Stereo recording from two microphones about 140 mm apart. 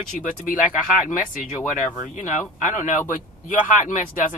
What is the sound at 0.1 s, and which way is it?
Speech, 70° left (ahead or behind).